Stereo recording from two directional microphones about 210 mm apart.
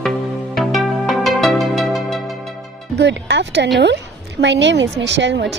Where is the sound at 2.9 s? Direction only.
55° right (ahead or behind).